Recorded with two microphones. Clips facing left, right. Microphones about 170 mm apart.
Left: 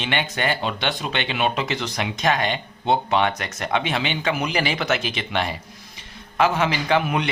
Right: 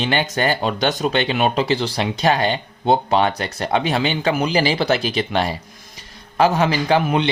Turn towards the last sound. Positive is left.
turn(degrees=-30)  # may be behind; listen again after turning